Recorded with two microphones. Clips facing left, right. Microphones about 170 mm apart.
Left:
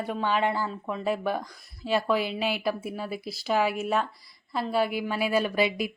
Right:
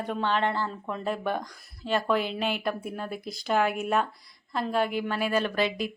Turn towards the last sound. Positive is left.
turn(degrees=10)  # may be behind; listen again after turning